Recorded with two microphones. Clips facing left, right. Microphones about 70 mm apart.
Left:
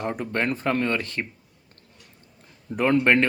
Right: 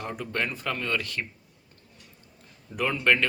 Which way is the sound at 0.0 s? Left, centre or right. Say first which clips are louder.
Left 5 dB; left.